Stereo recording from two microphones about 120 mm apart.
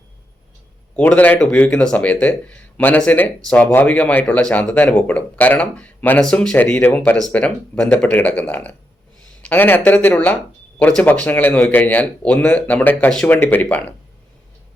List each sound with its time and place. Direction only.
0.9 s speech: 15° left (ahead or behind)